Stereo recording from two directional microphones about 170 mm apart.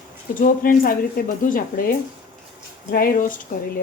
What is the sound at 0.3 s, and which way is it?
Speech, 55° left (ahead or behind).